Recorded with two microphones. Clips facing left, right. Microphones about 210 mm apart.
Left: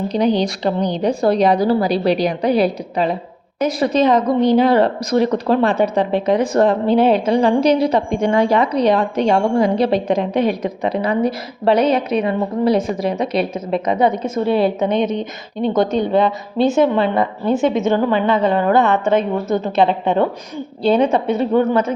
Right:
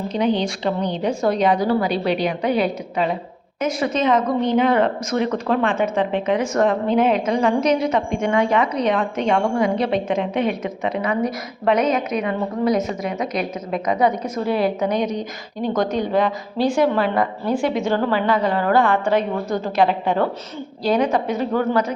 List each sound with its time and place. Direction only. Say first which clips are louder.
0.1 s a woman's voice: left 3 dB; 35° left (ahead or behind)